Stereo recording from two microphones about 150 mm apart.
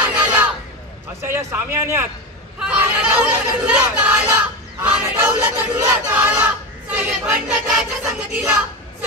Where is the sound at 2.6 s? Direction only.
5° right (ahead or behind).